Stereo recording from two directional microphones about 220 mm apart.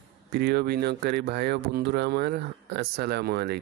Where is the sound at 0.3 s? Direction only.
50° right (ahead or behind).